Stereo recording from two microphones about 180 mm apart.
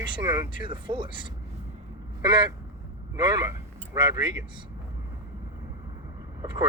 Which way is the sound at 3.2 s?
20° right (ahead or behind).